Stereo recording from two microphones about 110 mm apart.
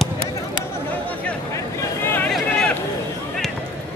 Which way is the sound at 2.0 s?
20° left (ahead or behind).